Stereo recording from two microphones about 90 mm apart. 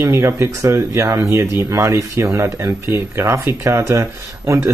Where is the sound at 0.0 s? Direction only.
30° right (ahead or behind).